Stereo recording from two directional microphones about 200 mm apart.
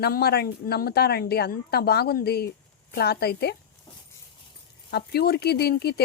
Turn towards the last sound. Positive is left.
turn(degrees=50)  # may be behind; listen again after turning